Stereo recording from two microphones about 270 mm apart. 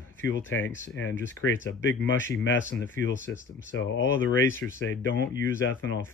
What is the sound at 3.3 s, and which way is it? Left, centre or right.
Speech, left.